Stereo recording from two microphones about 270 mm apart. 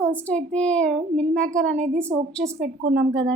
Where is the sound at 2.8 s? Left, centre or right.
Right.